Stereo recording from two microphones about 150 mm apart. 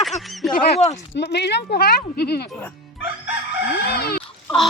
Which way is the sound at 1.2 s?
90° left.